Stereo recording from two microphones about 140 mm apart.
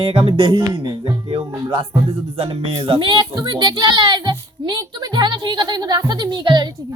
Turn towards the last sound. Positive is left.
turn(degrees=-35)  # may be behind; listen again after turning